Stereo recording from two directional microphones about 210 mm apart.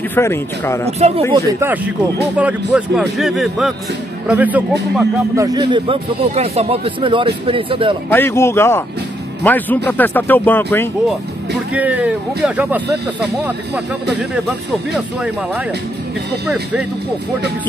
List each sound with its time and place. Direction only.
0.1 s speech: 10° left (ahead or behind)
0.8 s speech: 30° right (ahead or behind)
1.3 s speech: 10° right (ahead or behind)
8.1 s speech: 10° left (ahead or behind)
11.7 s speech: 5° right (ahead or behind)
14.3 s speech: 5° right (ahead or behind)